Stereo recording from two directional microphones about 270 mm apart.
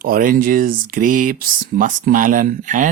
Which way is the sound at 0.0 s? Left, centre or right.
Right.